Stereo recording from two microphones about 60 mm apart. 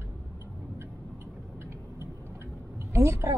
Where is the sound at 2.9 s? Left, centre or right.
Right.